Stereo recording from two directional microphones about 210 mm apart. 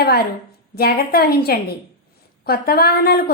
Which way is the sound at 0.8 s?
45° left (ahead or behind).